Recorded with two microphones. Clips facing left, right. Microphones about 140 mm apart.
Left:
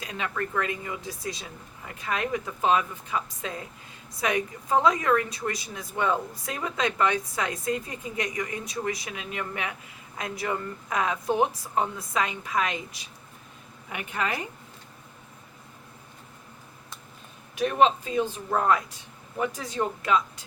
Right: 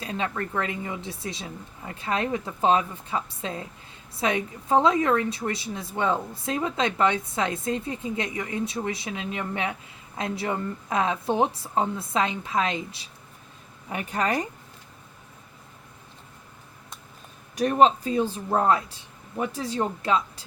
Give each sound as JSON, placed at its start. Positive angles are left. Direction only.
{"t": 0.0, "sound": "a woman's voice", "side_deg": -30}
{"t": 17.5, "sound": "a woman's voice", "side_deg": -40}